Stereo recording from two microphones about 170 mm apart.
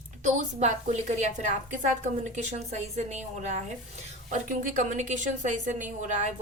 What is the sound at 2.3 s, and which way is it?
A woman's voice, 40° right (ahead or behind).